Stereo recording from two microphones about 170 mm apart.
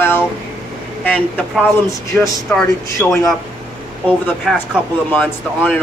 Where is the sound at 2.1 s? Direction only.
5° left (ahead or behind).